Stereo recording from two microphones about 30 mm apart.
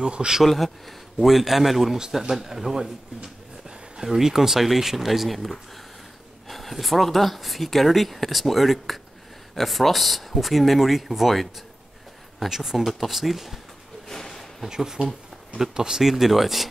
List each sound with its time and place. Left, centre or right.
0.0 s speech: right
0.5 s speech: centre
1.2 s speech: centre
3.2 s a sound: right
4.0 s speech: centre
14.0 s a sound: centre
14.8 s speech: centre